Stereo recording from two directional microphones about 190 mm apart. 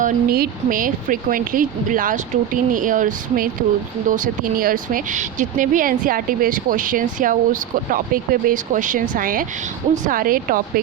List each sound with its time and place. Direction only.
0.0 s speech: 45° right (ahead or behind)